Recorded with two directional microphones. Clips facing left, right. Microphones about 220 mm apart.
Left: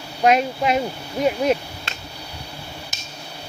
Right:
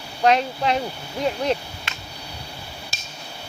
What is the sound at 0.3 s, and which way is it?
Speech, 10° left (ahead or behind).